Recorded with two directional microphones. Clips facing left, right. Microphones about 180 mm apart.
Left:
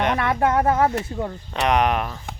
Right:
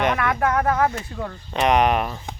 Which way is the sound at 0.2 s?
25° left (ahead or behind).